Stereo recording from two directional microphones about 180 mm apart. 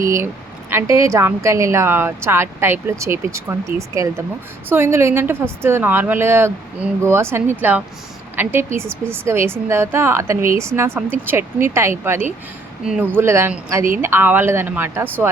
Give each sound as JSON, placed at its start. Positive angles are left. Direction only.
{"t": 0.0, "sound": "a woman's voice", "side_deg": -15}